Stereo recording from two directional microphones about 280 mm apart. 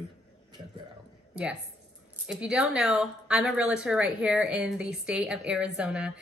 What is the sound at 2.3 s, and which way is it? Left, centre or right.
A woman's voice, centre.